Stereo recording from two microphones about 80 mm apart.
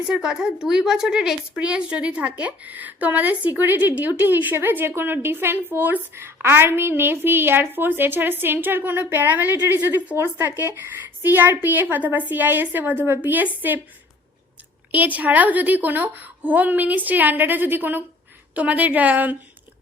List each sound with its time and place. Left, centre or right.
0.1 s a woman's voice: centre; by 13.8 s right
14.9 s a woman's voice: right